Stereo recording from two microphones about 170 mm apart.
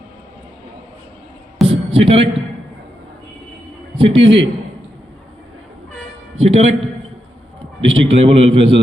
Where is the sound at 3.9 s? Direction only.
35° right (ahead or behind).